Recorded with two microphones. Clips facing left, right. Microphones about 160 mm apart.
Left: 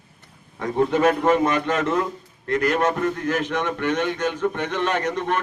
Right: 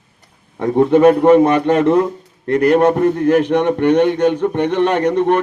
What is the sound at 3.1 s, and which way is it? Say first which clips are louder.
A man's voice: right 11 dB; 60° right (ahead or behind).